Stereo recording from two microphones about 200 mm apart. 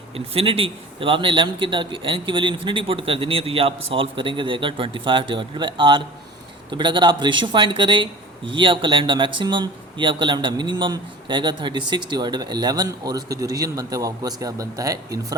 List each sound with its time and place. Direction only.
0.3 s speech: 30° right (ahead or behind)